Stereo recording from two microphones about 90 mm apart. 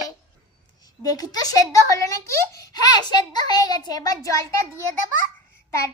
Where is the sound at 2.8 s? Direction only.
50° left (ahead or behind).